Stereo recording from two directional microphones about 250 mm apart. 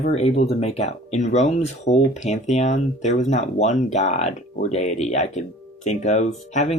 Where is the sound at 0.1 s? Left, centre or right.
Left.